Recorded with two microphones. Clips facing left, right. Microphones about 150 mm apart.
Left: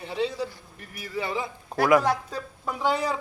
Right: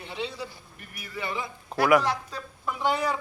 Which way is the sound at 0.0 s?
40° left (ahead or behind).